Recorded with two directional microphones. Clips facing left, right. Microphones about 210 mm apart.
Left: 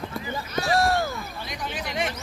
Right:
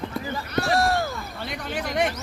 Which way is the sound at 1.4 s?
60° right (ahead or behind).